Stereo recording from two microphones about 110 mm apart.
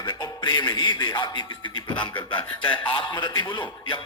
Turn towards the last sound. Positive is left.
turn(degrees=45)  # may be behind; listen again after turning